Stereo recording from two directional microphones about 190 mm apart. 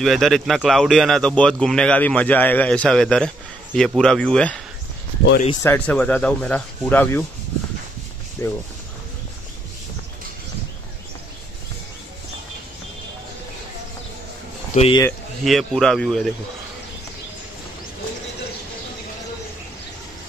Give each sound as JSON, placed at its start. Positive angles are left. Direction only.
{"t": 0.0, "sound": "speech", "side_deg": 0}
{"t": 5.6, "sound": "speech", "side_deg": 10}
{"t": 8.4, "sound": "speech", "side_deg": 15}
{"t": 14.7, "sound": "speech", "side_deg": 35}
{"t": 15.4, "sound": "speech", "side_deg": 0}